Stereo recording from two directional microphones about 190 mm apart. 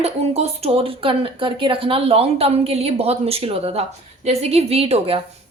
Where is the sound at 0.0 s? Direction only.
30° right (ahead or behind).